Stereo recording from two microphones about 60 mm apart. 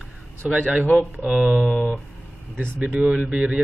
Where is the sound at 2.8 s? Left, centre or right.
Right.